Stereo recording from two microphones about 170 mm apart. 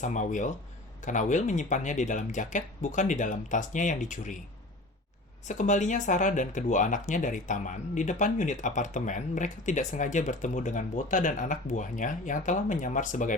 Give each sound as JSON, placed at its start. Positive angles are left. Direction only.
{"t": 0.0, "sound": "speech", "side_deg": 45}
{"t": 5.5, "sound": "speech", "side_deg": 45}